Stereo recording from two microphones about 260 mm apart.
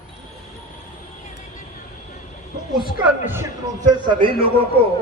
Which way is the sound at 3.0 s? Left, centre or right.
Centre.